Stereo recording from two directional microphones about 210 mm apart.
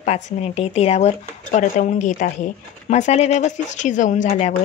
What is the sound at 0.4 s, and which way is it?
Speech, 30° left (ahead or behind).